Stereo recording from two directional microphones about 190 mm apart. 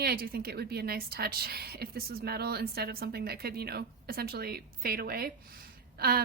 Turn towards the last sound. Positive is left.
turn(degrees=-50)  # may be behind; listen again after turning